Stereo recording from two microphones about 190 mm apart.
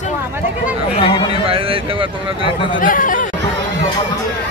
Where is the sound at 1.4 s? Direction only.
30° right (ahead or behind).